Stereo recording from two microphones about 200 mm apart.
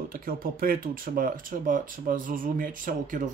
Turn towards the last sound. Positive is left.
turn(degrees=-40)  # may be behind; listen again after turning